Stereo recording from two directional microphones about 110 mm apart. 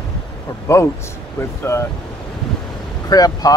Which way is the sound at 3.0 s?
35° left (ahead or behind).